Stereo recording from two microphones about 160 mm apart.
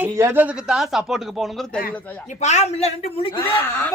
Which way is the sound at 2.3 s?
45° left (ahead or behind).